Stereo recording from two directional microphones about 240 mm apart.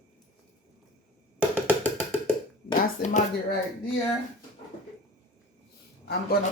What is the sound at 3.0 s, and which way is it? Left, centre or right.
Speech, left.